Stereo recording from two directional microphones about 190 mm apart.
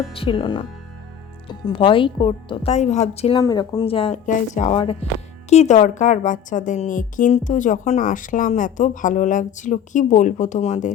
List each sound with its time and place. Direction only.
0.1 s a woman's voice: 30° left (ahead or behind)
2.7 s a woman's voice: 35° left (ahead or behind)
3.3 s a woman's voice: 20° left (ahead or behind); by 10.9 s 40° left (ahead or behind)